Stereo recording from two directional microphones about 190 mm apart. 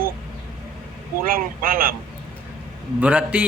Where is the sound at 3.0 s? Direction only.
5° right (ahead or behind).